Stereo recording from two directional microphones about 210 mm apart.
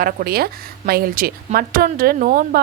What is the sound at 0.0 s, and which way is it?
A woman's voice, 45° right (ahead or behind).